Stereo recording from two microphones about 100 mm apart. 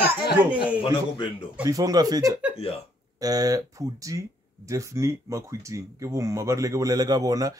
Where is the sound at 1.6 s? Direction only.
35° right (ahead or behind).